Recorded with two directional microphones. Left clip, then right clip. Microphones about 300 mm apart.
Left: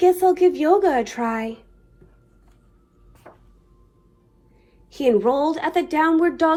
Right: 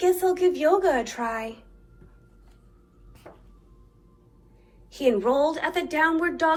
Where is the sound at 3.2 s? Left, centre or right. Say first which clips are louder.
Left 1 dB; centre.